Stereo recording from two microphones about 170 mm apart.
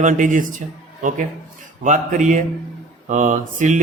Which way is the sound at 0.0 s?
50° right (ahead or behind).